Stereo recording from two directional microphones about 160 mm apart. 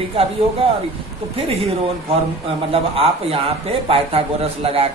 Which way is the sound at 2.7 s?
35° right (ahead or behind).